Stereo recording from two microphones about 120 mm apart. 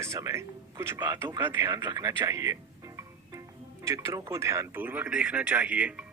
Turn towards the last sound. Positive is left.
turn(degrees=-10)  # may be behind; listen again after turning